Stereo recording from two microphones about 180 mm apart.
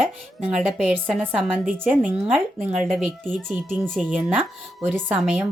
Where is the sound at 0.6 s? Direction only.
5° right (ahead or behind).